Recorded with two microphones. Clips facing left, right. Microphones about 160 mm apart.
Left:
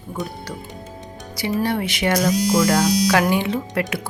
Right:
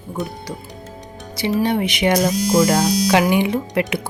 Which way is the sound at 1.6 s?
20° right (ahead or behind).